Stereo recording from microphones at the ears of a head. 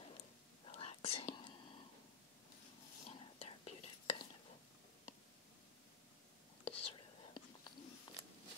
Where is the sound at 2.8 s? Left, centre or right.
Left.